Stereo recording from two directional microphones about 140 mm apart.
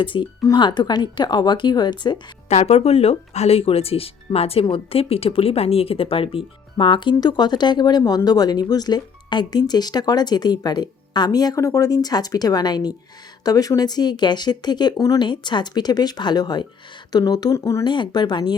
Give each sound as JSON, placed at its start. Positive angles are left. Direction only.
{"t": 0.0, "sound": "speech", "side_deg": 35}
{"t": 2.5, "sound": "speech", "side_deg": 50}
{"t": 17.8, "sound": "speech", "side_deg": 35}